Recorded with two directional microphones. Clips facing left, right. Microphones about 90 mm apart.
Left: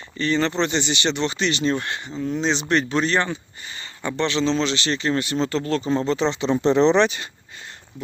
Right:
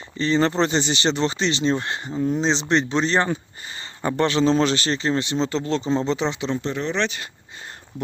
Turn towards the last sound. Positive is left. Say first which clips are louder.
# left 3 dB
turn(degrees=0)  # may be behind; listen again after turning